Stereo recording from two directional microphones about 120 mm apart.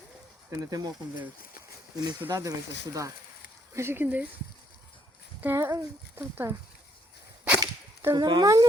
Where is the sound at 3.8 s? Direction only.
20° right (ahead or behind).